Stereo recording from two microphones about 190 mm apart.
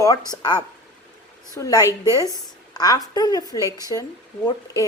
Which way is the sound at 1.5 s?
15° left (ahead or behind).